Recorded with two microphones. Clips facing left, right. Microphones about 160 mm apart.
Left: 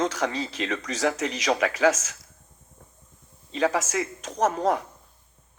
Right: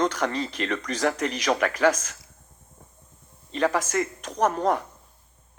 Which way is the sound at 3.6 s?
60° right (ahead or behind).